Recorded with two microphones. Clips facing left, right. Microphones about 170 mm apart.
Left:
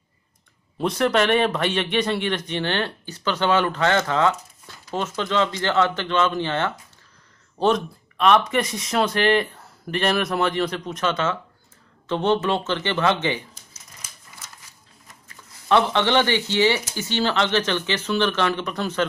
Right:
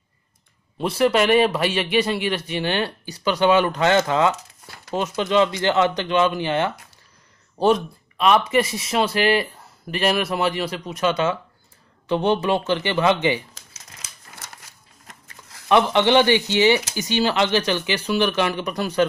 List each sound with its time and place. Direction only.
0.7 s a man's voice: 5° right (ahead or behind)
13.6 s a sound: 85° right
15.7 s a man's voice: 15° right (ahead or behind)